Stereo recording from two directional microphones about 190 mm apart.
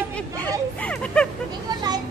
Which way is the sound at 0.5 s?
5° left (ahead or behind).